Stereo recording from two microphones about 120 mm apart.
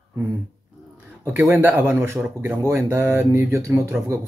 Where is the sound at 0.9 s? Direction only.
20° right (ahead or behind).